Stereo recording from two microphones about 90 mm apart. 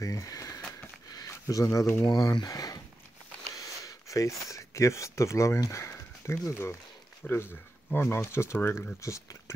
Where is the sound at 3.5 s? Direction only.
40° left (ahead or behind).